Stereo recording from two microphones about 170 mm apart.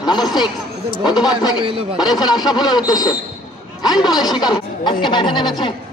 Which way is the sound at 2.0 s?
25° left (ahead or behind).